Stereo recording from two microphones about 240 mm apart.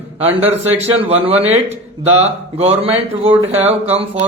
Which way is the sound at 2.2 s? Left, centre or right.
Right.